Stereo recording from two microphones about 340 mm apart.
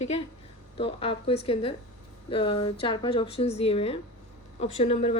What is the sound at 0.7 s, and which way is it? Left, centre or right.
A woman's voice, centre.